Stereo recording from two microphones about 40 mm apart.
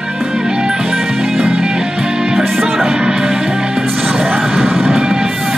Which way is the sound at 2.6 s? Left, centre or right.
Centre.